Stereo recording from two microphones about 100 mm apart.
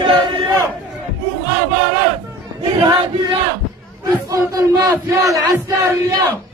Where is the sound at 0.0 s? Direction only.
50° right (ahead or behind).